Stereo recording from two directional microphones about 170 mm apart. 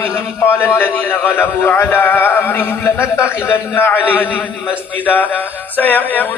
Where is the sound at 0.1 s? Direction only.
15° left (ahead or behind).